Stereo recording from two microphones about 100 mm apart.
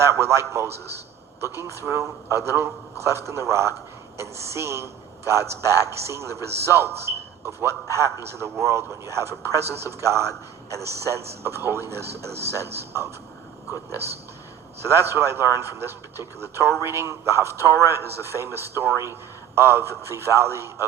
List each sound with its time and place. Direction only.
0.0 s a man's voice: 25° right (ahead or behind)